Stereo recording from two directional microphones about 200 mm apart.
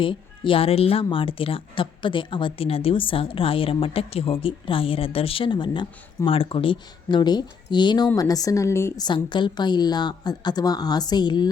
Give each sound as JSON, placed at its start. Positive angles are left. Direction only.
{"t": 0.0, "sound": "a woman's voice", "side_deg": 25}